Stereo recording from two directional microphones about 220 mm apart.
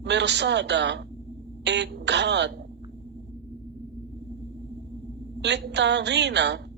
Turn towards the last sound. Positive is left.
turn(degrees=-50)  # may be behind; listen again after turning